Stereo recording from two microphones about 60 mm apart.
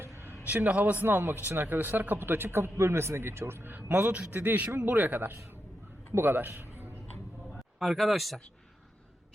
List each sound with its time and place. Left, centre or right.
0.0 s a sound: right
0.4 s a man's voice: right
4.1 s a man's voice: right
7.8 s speech: centre